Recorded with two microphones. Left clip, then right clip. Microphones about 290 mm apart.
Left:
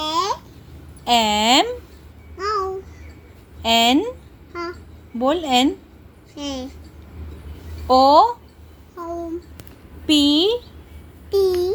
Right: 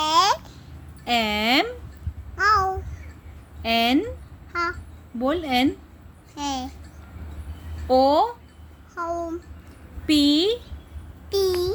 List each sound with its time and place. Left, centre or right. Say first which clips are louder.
0.0 s babbling: right 3 dB; centre
1.0 s speech: left 6 dB; centre
2.4 s babbling: right 4 dB; centre
3.6 s a woman's voice: left 5 dB; centre
5.2 s a woman's voice: left 5 dB; centre
6.3 s babbling: right 1 dB; centre
7.9 s a woman's voice: left 6 dB; centre
9.0 s a sound: right 2 dB; right
10.1 s a woman's voice: left 3 dB; centre
11.3 s babbling: left 4 dB; centre